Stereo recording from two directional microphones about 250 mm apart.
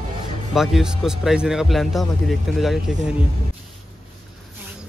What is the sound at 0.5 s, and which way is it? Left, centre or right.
A man's voice, centre.